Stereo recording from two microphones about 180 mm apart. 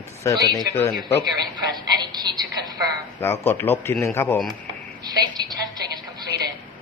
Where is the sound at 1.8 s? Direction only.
25° right (ahead or behind).